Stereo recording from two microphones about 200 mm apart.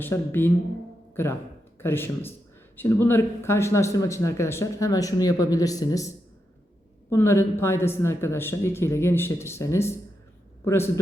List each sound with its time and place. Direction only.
0.0 s speech: 10° left (ahead or behind)
7.1 s speech: 15° left (ahead or behind)